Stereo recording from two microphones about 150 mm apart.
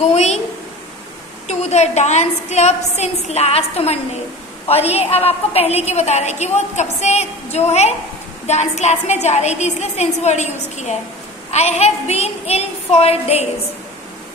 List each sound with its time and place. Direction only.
0.0 s a woman's voice: 45° left (ahead or behind)
1.5 s a woman's voice: 45° left (ahead or behind)